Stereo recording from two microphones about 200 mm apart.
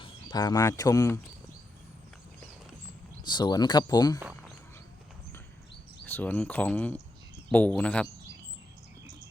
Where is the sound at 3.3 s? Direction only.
20° left (ahead or behind).